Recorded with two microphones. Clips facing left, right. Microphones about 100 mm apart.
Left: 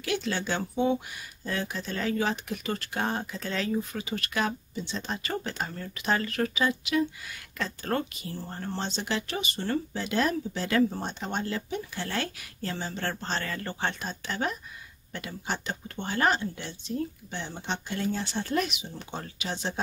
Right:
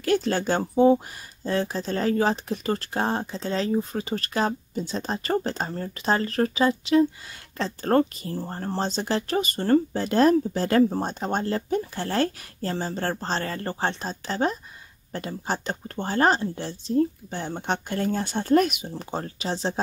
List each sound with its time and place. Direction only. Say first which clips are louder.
0.0 s speech: right 7 dB; 45° right (ahead or behind)